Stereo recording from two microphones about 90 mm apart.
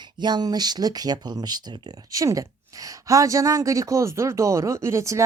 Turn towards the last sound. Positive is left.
turn(degrees=-35)  # may be behind; listen again after turning